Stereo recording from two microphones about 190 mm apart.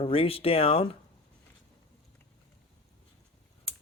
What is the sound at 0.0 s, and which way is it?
Speech, 30° left (ahead or behind).